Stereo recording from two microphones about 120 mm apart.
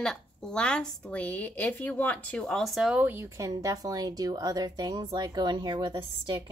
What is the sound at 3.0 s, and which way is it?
A woman's voice, 20° right (ahead or behind).